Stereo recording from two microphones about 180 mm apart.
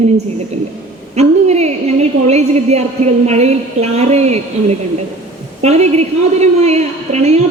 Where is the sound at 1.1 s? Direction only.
40° right (ahead or behind).